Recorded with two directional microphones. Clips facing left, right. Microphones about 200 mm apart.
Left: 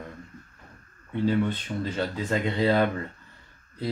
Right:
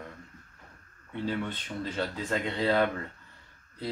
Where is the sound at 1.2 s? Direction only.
Centre (ahead or behind).